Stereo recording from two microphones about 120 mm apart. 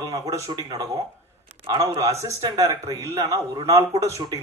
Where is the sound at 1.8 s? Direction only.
25° right (ahead or behind).